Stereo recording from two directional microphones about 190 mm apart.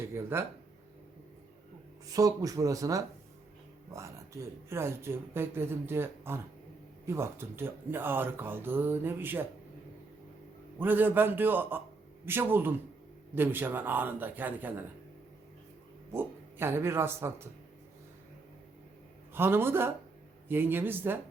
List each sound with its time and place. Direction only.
0.1 s speech: 10° right (ahead or behind)
2.1 s speech: 20° right (ahead or behind)
10.8 s speech: 10° right (ahead or behind)
16.1 s speech: 10° right (ahead or behind)
19.3 s speech: 10° right (ahead or behind)